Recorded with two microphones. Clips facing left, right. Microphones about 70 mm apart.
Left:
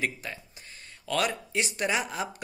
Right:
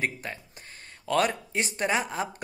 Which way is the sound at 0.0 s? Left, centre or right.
Right.